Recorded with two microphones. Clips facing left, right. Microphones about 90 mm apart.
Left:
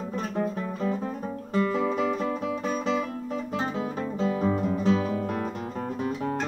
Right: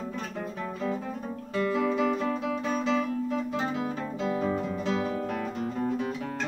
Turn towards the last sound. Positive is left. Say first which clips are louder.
# left 4 dB
turn(degrees=30)  # may be behind; listen again after turning